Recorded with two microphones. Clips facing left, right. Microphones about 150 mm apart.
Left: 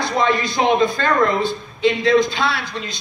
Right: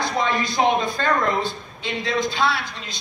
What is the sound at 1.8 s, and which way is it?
Speech, 90° left.